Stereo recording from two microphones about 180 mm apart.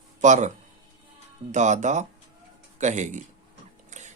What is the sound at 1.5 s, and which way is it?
Speech, 40° right (ahead or behind).